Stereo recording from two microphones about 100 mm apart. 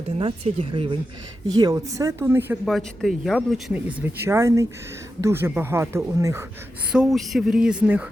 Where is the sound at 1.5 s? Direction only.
35° right (ahead or behind).